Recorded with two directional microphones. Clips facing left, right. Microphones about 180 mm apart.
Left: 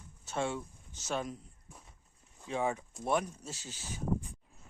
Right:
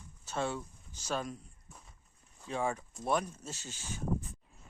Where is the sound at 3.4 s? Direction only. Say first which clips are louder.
Even; 10° left (ahead or behind).